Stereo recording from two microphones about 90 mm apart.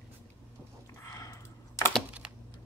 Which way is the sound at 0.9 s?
40° left (ahead or behind).